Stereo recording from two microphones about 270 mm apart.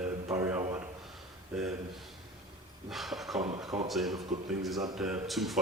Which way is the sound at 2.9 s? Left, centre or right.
Centre.